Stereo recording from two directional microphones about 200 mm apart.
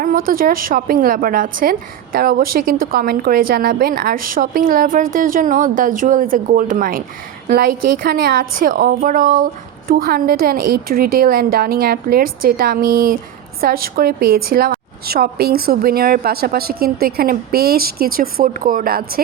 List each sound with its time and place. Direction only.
0.0 s a woman's voice: 45° right (ahead or behind)